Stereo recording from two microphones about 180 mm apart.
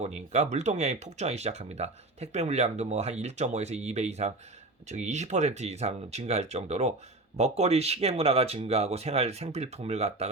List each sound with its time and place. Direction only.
0.0 s speech: 40° right (ahead or behind)